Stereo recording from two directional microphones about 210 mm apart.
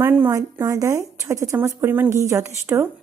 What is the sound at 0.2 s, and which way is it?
A woman's voice, 15° right (ahead or behind).